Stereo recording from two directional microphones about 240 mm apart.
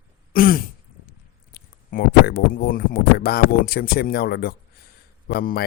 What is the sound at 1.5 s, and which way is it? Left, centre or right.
Mantra, left.